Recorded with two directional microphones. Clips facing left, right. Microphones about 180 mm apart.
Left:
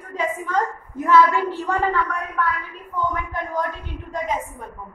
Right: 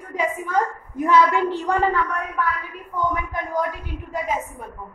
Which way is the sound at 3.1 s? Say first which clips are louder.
Right 1 dB; 10° right (ahead or behind).